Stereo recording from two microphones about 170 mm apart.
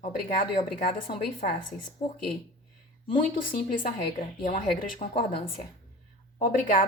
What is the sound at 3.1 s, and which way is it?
A woman's voice, 55° left (ahead or behind).